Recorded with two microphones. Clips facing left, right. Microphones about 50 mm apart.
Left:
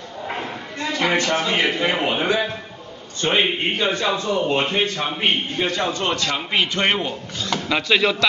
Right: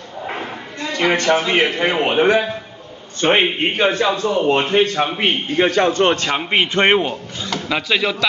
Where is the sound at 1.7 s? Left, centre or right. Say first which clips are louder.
Right 3 dB; right.